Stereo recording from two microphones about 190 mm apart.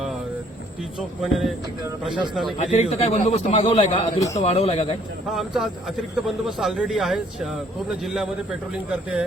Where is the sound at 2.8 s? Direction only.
35° left (ahead or behind).